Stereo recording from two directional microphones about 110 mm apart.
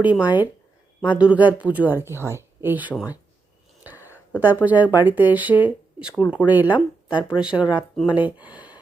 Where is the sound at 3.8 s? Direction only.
15° right (ahead or behind).